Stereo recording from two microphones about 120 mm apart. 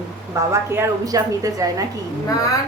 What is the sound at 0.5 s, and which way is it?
Speech, 25° right (ahead or behind).